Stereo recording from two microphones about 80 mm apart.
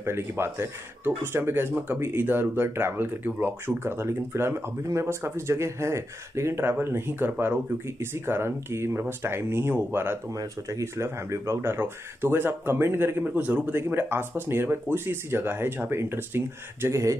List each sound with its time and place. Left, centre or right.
0.0 s speech: right
10.3 s speech: right